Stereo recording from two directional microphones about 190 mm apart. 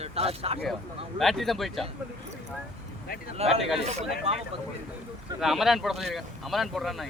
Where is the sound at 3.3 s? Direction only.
35° right (ahead or behind).